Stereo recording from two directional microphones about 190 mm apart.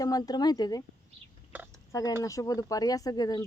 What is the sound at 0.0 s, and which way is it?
Speech, 20° left (ahead or behind).